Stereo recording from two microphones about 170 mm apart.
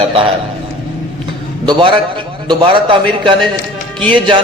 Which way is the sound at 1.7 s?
30° right (ahead or behind).